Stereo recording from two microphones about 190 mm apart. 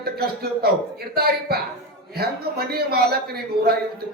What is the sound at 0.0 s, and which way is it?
A man's voice, 55° right (ahead or behind).